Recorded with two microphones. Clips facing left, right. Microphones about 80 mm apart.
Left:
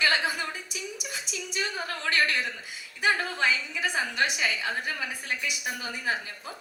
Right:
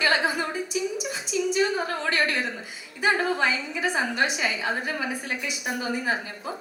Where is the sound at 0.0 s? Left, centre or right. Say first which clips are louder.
Right 3 dB; right.